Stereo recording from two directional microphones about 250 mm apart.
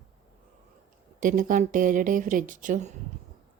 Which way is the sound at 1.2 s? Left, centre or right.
Right.